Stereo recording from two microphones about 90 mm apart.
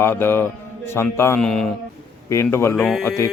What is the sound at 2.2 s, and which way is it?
Speech, 30° left (ahead or behind).